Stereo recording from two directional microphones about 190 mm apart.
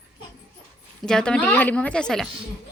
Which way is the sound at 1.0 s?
5° left (ahead or behind).